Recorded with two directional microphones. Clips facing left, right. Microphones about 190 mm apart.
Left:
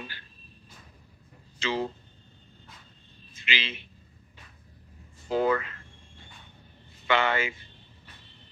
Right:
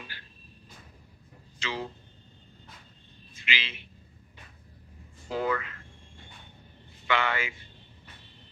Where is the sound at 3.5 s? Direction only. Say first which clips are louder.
Left 2 dB; 25° left (ahead or behind).